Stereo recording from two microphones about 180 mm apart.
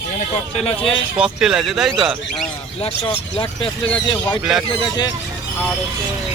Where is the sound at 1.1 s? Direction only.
5° right (ahead or behind).